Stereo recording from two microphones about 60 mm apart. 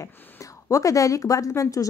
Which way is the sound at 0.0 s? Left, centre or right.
Left.